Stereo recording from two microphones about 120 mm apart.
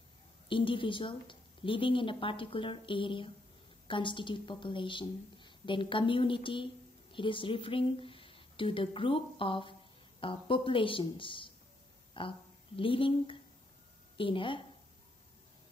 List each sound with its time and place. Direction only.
0.5 s a woman's voice: 45° left (ahead or behind)